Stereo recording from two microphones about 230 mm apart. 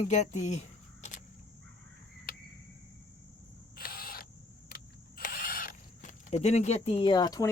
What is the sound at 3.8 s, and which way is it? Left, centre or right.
Camera, left.